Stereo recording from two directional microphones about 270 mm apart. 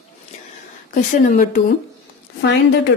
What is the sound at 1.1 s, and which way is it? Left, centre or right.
Speech, left.